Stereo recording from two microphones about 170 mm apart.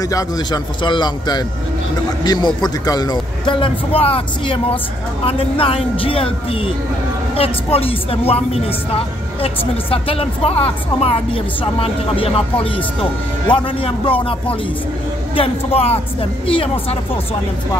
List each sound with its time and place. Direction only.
0.0 s a man's voice: 20° left (ahead or behind)